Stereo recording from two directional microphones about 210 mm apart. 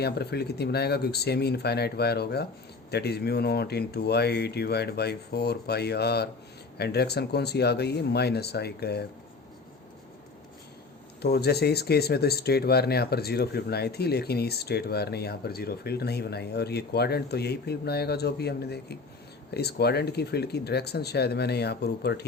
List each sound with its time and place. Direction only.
0.0 s speech: 50° left (ahead or behind)
11.2 s speech: 50° left (ahead or behind)